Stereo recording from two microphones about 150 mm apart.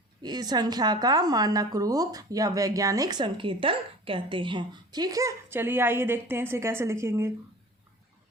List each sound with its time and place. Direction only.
0.2 s a woman's voice: 25° right (ahead or behind)